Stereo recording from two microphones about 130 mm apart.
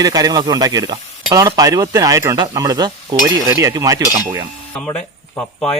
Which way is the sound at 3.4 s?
25° right (ahead or behind).